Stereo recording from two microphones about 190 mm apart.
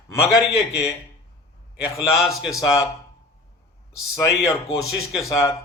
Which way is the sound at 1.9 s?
Centre (ahead or behind).